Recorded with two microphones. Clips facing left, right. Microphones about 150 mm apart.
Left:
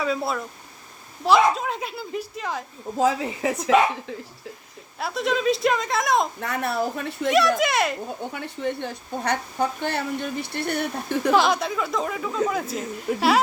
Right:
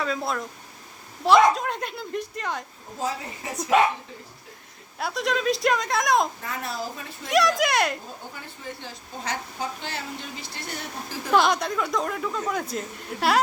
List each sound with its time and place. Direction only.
0.0 s speech: 5° left (ahead or behind)
3.0 s speech: 90° left
4.9 s speech: centre (ahead or behind)
6.4 s a woman's voice: 65° left (ahead or behind)
7.3 s speech: centre (ahead or behind)
8.3 s a woman's voice: 65° left (ahead or behind)
11.3 s speech: centre (ahead or behind)